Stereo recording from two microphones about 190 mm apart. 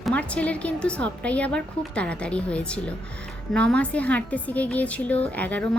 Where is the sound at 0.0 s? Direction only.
5° left (ahead or behind).